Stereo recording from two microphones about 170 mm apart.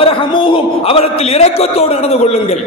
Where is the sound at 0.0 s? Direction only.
30° left (ahead or behind).